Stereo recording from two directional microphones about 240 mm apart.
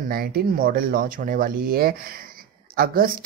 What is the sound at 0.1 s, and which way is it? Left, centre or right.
Speech, right.